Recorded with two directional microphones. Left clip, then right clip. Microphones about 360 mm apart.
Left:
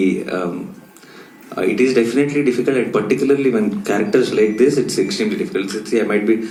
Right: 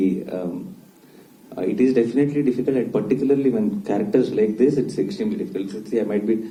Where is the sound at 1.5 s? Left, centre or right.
Left.